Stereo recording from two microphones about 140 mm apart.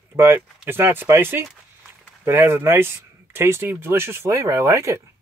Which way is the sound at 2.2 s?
15° right (ahead or behind).